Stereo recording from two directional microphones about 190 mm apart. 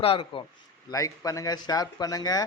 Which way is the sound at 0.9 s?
15° left (ahead or behind).